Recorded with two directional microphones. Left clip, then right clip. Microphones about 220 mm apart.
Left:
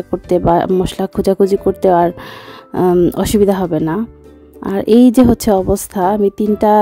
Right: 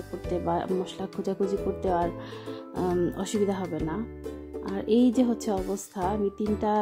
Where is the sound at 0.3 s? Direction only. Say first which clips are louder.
Left 16 dB; 50° left (ahead or behind).